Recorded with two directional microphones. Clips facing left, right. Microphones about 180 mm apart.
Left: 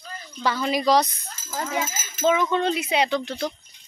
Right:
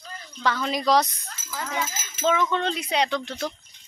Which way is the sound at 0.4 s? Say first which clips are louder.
Left 2 dB; 5° left (ahead or behind).